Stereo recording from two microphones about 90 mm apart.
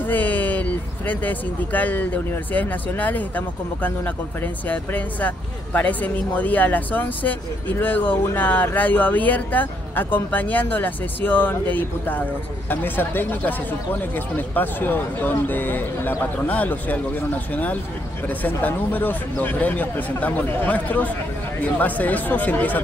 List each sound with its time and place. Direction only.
0.0 s speech: 20° left (ahead or behind)
18.4 s speech: 20° left (ahead or behind)